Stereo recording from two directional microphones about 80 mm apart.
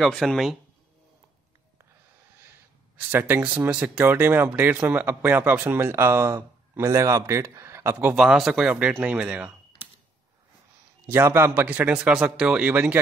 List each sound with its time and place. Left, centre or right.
0.0 s speech: centre
3.1 s a man's voice: right
8.2 s speech: centre
11.1 s speech: right